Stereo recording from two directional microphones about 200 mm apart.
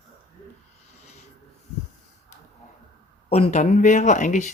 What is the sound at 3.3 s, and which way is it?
Speech, 30° left (ahead or behind).